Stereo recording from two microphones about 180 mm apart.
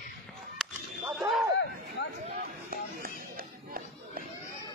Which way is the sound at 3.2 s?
55° right (ahead or behind).